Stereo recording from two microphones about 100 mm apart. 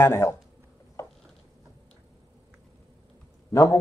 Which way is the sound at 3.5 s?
35° left (ahead or behind).